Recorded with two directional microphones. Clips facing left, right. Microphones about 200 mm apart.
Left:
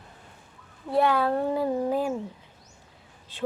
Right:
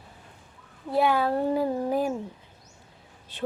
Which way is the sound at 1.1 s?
20° right (ahead or behind).